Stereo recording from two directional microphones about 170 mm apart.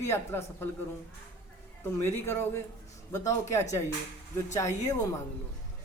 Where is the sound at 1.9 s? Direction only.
15° left (ahead or behind).